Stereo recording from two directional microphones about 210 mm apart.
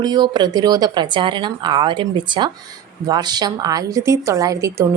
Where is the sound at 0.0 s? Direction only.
20° right (ahead or behind).